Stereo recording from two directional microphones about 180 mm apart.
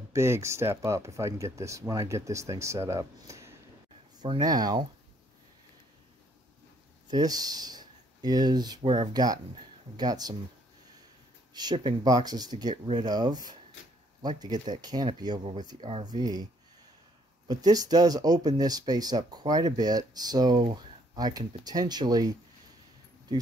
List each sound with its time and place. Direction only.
0.1 s speech: 15° right (ahead or behind)
7.1 s speech: 20° right (ahead or behind)
11.5 s speech: 25° right (ahead or behind)
17.5 s speech: 20° right (ahead or behind)